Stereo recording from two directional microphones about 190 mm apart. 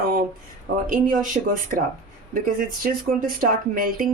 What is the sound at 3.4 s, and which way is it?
Speech, 45° right (ahead or behind).